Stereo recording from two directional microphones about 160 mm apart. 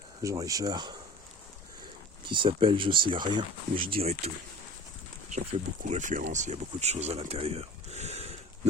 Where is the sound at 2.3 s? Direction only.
30° right (ahead or behind).